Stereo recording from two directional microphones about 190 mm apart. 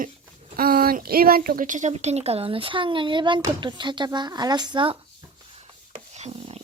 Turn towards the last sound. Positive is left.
turn(degrees=-30)  # may be behind; listen again after turning